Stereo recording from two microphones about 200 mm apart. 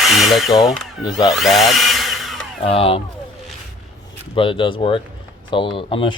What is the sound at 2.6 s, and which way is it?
Speech, 30° left (ahead or behind).